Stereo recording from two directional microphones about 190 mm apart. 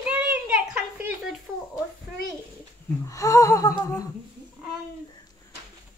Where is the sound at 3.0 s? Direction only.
15° left (ahead or behind).